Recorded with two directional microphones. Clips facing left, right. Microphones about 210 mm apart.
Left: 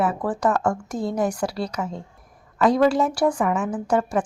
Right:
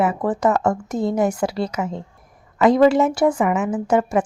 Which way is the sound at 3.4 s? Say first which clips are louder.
Right 3 dB; 5° right (ahead or behind).